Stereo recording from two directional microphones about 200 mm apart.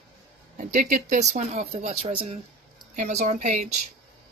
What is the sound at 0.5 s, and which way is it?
Speech, 40° right (ahead or behind).